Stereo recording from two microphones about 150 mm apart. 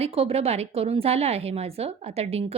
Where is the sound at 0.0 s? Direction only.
40° right (ahead or behind).